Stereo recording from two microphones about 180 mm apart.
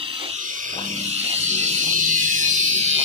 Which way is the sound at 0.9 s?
40° right (ahead or behind).